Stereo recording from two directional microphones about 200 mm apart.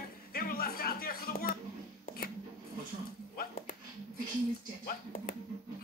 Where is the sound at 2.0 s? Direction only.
45° left (ahead or behind).